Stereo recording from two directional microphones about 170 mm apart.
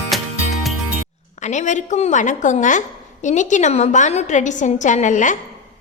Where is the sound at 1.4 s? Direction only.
45° left (ahead or behind).